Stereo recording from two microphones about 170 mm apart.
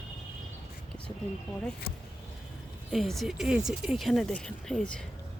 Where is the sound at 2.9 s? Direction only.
Centre (ahead or behind).